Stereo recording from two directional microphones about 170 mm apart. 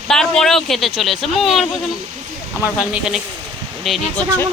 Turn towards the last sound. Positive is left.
turn(degrees=5)  # may be behind; listen again after turning